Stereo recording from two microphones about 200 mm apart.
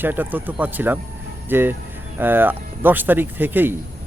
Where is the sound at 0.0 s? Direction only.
10° right (ahead or behind).